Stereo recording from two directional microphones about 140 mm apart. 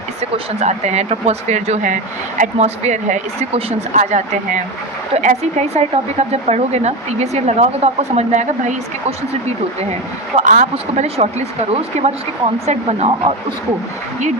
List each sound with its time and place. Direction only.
0.6 s speech: 55° right (ahead or behind)
10.3 s speech: 65° right (ahead or behind); by 13.3 s 45° right (ahead or behind)